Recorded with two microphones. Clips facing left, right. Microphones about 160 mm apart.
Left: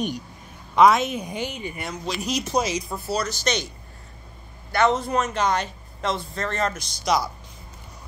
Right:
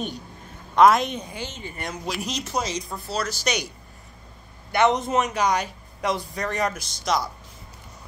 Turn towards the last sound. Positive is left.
turn(degrees=0)  # may be behind; listen again after turning